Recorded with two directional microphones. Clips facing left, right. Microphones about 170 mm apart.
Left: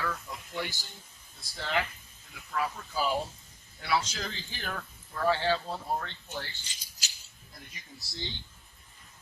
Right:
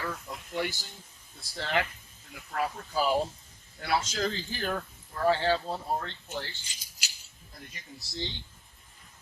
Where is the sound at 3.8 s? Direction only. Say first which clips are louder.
Right 2 dB; 45° right (ahead or behind).